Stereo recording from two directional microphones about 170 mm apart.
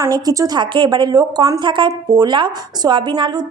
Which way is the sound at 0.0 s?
20° right (ahead or behind).